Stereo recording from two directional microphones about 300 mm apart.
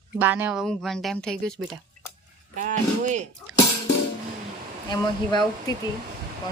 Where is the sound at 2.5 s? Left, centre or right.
Right.